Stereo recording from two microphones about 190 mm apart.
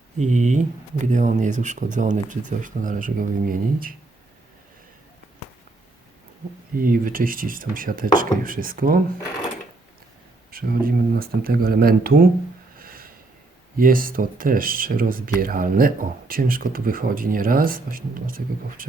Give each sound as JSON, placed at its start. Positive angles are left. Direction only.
{"t": 0.2, "sound": "speech", "side_deg": -40}
{"t": 6.7, "sound": "speech", "side_deg": -45}
{"t": 10.5, "sound": "speech", "side_deg": -50}
{"t": 12.8, "sound": "snort", "side_deg": -50}
{"t": 13.7, "sound": "speech", "side_deg": -50}